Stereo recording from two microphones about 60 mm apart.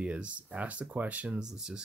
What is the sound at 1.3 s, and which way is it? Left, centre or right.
Speech, centre.